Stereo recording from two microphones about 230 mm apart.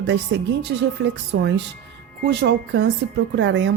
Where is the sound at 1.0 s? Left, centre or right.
Right.